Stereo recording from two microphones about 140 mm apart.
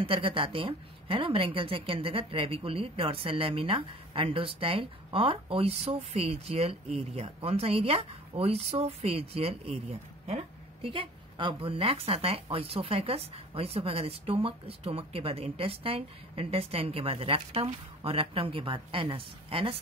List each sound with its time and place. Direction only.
0.0 s a woman's voice: 40° right (ahead or behind)